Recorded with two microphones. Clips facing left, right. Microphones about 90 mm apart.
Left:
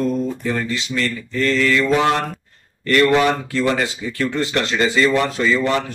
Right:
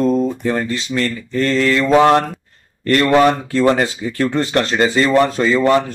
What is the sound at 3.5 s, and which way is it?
Speech, 35° right (ahead or behind).